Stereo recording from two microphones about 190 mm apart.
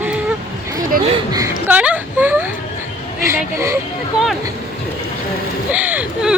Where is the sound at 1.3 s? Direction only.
15° right (ahead or behind).